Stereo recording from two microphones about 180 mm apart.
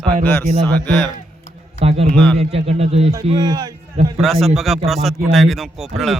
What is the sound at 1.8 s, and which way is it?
A man's voice, 35° right (ahead or behind).